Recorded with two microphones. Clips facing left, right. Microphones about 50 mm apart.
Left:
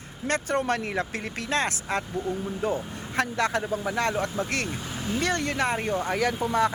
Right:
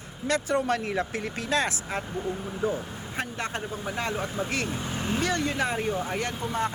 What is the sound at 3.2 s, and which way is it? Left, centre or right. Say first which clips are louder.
Speech: left 7 dB; left.